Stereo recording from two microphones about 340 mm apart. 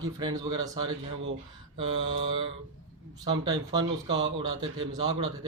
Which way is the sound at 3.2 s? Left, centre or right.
Centre.